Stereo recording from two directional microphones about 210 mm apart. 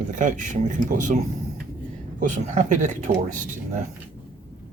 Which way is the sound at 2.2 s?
35° right (ahead or behind).